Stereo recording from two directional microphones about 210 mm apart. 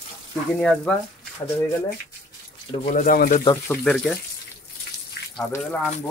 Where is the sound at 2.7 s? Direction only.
40° left (ahead or behind).